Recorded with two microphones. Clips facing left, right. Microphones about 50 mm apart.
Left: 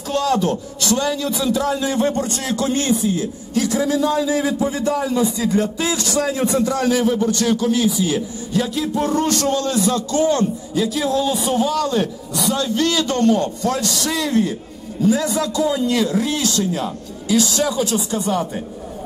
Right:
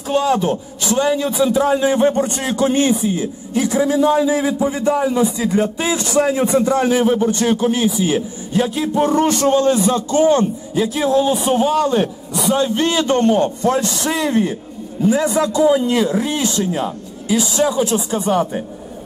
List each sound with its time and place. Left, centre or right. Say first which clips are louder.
0.1 s a man's voice: right 2 dB; centre